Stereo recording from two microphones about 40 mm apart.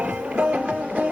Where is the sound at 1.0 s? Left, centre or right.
Right.